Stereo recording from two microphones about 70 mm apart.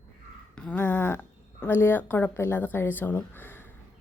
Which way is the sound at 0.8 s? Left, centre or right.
Left.